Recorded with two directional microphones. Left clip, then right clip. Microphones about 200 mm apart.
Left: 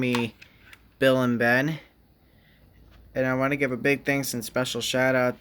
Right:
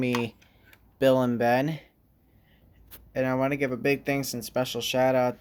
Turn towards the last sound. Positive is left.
turn(degrees=0)  # may be behind; listen again after turning